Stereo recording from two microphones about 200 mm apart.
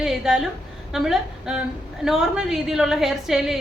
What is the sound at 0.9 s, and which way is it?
A woman's voice, centre (ahead or behind).